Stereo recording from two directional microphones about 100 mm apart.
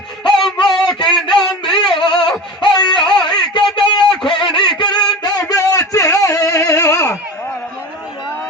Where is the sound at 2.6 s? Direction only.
50° left (ahead or behind); by 7.2 s 30° left (ahead or behind).